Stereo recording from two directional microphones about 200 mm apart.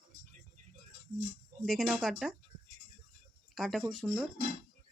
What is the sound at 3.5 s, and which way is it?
Speech, centre (ahead or behind).